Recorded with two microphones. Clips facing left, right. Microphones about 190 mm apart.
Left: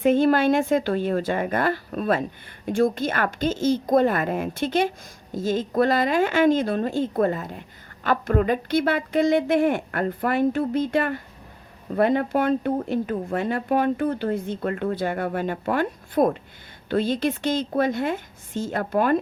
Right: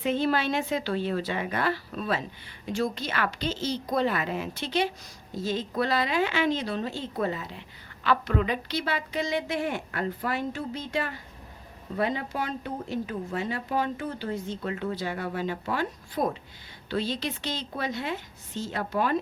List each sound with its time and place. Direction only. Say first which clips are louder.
0.0 s a woman's voice: left 8 dB; 50° left (ahead or behind)